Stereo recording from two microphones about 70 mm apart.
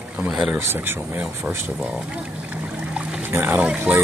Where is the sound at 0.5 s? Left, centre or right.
Right.